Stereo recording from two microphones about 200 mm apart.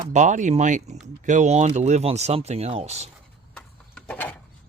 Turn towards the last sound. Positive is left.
turn(degrees=5)  # may be behind; listen again after turning